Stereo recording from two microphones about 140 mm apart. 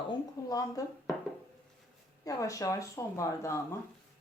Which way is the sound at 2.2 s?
25° left (ahead or behind).